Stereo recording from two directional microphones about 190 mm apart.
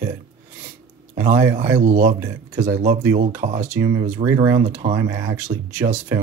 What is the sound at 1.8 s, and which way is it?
Speech, 40° right (ahead or behind).